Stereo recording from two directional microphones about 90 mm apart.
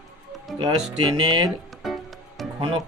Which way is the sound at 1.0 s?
55° right (ahead or behind).